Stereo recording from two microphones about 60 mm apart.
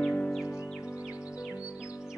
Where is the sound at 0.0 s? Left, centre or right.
Centre.